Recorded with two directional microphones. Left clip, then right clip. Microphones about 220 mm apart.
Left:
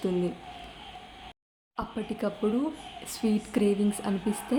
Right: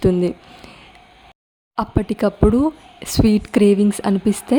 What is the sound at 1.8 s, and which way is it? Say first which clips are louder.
A woman's voice: right 13 dB; 45° right (ahead or behind).